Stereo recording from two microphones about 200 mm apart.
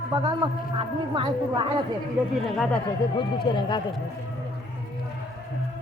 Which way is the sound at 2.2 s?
5° right (ahead or behind).